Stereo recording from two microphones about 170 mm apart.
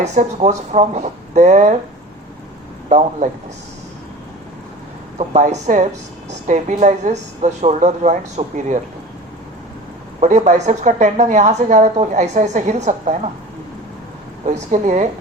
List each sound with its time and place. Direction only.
0.0 s a woman's voice: 45° right (ahead or behind)
3.2 s a woman's voice: 45° right (ahead or behind)
5.1 s a woman's voice: 40° right (ahead or behind)
10.2 s a woman's voice: 40° right (ahead or behind)
14.4 s a woman's voice: 45° right (ahead or behind)